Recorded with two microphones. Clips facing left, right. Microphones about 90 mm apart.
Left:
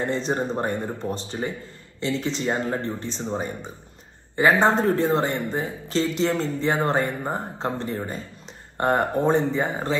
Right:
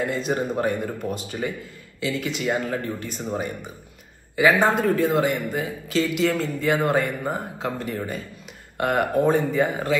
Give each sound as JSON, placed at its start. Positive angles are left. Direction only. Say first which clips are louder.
{"t": 0.3, "sound": "speech", "louder": "right 1 dB", "side_deg": 30}
{"t": 4.4, "sound": "speech", "louder": "even", "side_deg": 25}